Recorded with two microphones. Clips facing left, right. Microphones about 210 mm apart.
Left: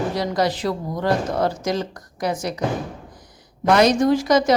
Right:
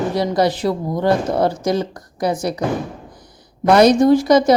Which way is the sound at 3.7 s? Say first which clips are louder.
Right 5 dB; 35° right (ahead or behind).